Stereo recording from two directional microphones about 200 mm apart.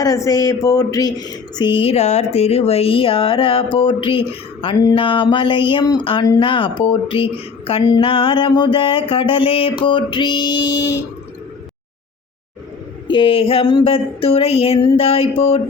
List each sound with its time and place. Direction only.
0.0 s speech: 15° left (ahead or behind)
13.1 s speech: 25° left (ahead or behind)